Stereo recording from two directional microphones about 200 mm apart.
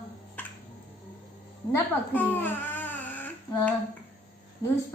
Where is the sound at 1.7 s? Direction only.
10° left (ahead or behind).